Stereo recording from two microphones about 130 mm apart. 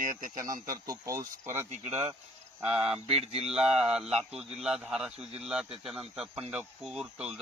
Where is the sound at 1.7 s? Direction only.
55° right (ahead or behind).